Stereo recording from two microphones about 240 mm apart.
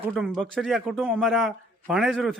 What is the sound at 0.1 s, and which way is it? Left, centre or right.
Speech, centre.